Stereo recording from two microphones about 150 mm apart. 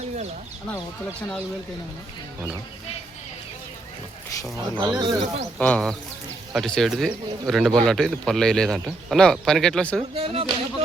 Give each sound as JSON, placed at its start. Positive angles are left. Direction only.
{"t": 4.9, "sound": "speech", "side_deg": -35}
{"t": 5.5, "sound": "speech", "side_deg": 10}
{"t": 10.2, "sound": "speech", "side_deg": -35}